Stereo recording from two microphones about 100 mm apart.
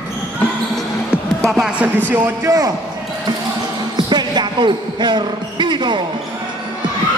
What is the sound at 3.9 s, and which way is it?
Basketball bounce, 45° right (ahead or behind).